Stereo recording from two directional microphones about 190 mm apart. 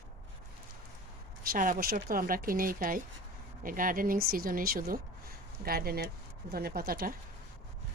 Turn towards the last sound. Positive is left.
turn(degrees=-50)  # may be behind; listen again after turning